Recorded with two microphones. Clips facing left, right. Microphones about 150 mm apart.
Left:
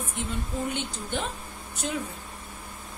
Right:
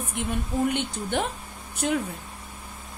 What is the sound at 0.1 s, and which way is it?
A woman's voice, 60° right (ahead or behind).